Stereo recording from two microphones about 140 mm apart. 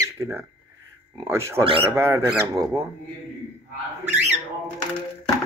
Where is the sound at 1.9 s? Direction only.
20° right (ahead or behind).